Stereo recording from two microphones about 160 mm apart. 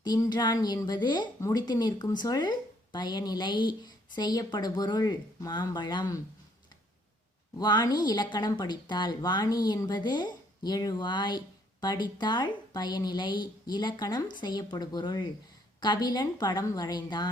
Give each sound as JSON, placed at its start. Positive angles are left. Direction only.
{"t": 0.0, "sound": "speech", "side_deg": 25}
{"t": 7.6, "sound": "speech", "side_deg": 25}